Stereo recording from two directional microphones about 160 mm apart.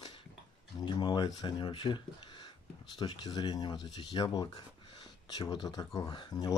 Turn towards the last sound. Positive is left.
turn(degrees=25)  # may be behind; listen again after turning